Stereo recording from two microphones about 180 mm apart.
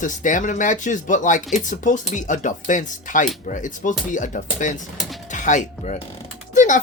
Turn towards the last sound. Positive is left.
turn(degrees=45)  # may be behind; listen again after turning